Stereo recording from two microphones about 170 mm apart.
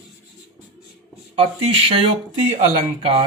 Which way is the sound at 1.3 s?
35° right (ahead or behind).